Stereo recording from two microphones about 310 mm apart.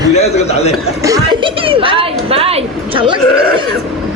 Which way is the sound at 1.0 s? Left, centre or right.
Centre.